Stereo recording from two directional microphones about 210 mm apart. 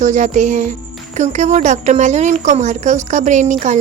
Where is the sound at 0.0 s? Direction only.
35° right (ahead or behind).